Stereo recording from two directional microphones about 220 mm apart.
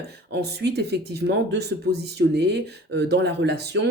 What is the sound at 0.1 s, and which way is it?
Speech, 50° right (ahead or behind).